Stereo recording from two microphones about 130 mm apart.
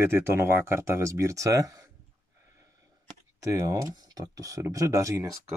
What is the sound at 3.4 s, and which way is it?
Speech, 25° right (ahead or behind).